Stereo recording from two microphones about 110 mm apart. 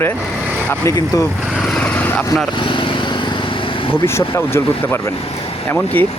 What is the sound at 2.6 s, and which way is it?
Vehicle, 50° left (ahead or behind).